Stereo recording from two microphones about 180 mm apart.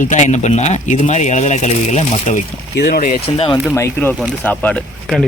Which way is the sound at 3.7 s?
15° left (ahead or behind).